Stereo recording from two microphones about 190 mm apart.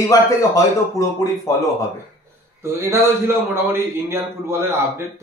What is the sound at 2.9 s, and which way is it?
A man's voice, 15° right (ahead or behind).